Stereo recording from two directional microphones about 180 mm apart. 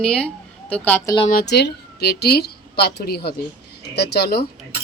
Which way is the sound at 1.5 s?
70° left (ahead or behind).